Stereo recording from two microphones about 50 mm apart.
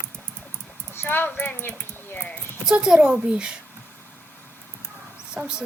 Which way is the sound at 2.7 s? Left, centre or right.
Centre.